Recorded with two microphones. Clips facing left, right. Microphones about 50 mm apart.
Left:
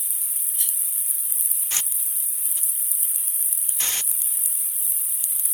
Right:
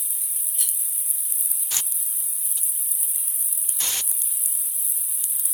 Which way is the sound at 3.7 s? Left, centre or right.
Left.